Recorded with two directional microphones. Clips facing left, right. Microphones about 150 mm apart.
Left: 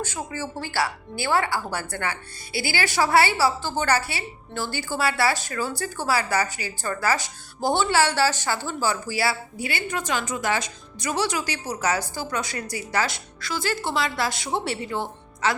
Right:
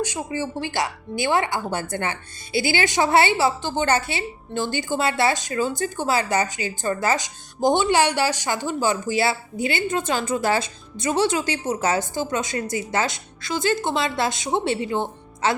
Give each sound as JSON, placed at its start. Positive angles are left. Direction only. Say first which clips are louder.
{"t": 0.0, "sound": "speech", "louder": "right 4 dB", "side_deg": -15}